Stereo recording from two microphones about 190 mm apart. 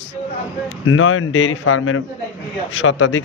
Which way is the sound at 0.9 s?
90° left.